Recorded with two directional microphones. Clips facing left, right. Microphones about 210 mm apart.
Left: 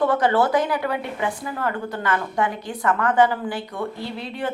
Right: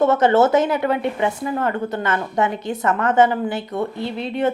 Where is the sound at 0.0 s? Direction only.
25° right (ahead or behind).